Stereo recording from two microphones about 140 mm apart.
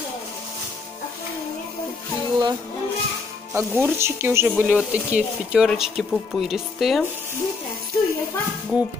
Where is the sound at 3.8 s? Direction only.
20° right (ahead or behind); by 7.0 s centre (ahead or behind).